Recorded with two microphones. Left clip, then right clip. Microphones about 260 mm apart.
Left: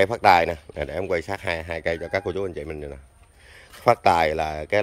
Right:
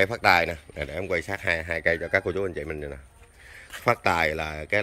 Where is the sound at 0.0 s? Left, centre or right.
Centre.